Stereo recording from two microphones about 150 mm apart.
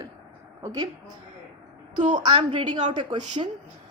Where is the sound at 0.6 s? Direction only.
25° right (ahead or behind).